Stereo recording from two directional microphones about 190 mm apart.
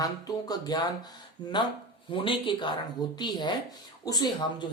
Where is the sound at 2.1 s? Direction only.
25° left (ahead or behind).